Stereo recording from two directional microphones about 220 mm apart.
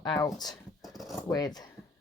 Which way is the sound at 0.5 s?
Centre (ahead or behind).